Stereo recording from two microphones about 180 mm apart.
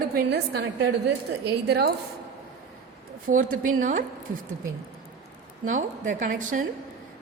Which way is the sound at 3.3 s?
50° right (ahead or behind).